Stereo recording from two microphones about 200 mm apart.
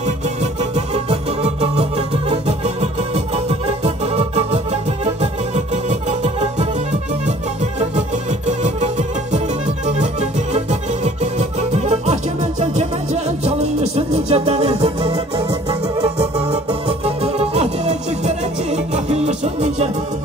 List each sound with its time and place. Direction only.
0.4 s music: 30° right (ahead or behind)
5.9 s music: 35° right (ahead or behind)
8.5 s music: 35° right (ahead or behind)
11.3 s music: 35° right (ahead or behind)